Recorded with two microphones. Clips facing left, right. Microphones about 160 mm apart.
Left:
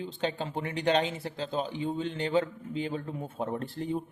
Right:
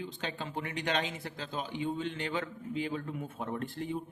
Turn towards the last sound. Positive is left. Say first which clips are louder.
# left 3 dB
turn(degrees=35)  # may be behind; listen again after turning